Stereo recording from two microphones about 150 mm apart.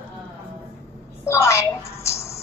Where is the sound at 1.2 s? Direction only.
20° left (ahead or behind).